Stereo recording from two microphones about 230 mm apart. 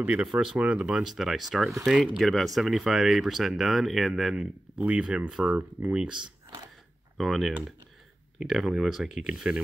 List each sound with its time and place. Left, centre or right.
0.0 s speech: centre
6.1 s speech: centre
7.2 s speech: centre